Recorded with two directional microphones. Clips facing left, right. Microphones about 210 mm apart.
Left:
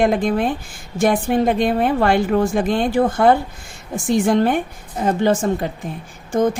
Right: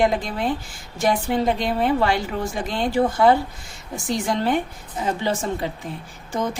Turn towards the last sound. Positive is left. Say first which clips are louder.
# left 8 dB
turn(degrees=50)  # may be behind; listen again after turning